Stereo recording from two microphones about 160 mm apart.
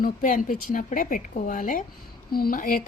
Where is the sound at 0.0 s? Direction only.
55° left (ahead or behind).